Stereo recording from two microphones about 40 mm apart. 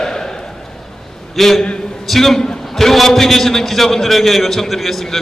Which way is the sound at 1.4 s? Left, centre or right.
Centre.